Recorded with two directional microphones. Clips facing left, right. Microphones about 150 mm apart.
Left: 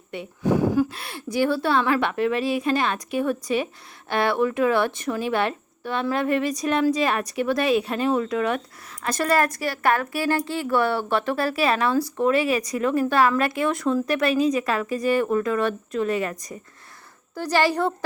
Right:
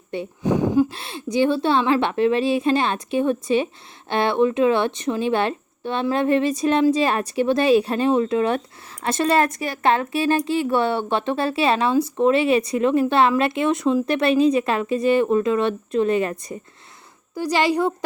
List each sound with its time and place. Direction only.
0.1 s speech: 30° right (ahead or behind)
17.3 s a woman's voice: 15° right (ahead or behind)